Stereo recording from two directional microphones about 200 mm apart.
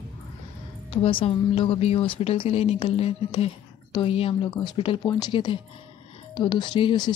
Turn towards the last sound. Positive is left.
turn(degrees=20)  # may be behind; listen again after turning